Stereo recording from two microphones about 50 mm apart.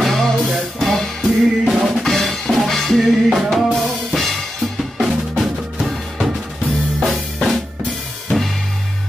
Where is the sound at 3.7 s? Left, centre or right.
Centre.